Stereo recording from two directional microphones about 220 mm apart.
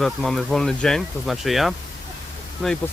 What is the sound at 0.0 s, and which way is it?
Speech, centre (ahead or behind).